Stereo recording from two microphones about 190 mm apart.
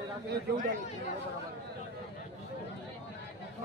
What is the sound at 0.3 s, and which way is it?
Speech, 45° right (ahead or behind).